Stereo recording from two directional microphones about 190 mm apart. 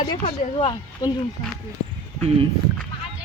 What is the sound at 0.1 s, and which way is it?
Speech, 25° left (ahead or behind).